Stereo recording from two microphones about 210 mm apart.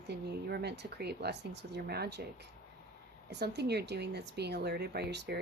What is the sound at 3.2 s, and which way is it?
Speech, 55° right (ahead or behind).